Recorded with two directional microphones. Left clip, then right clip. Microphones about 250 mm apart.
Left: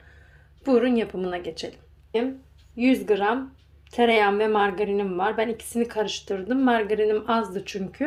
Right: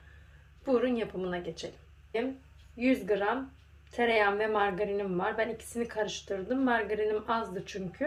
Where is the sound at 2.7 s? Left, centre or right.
Left.